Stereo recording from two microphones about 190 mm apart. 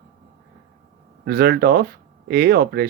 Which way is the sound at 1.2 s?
55° right (ahead or behind).